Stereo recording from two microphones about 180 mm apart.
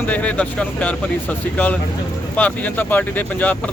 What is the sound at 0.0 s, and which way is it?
Speech, 10° left (ahead or behind).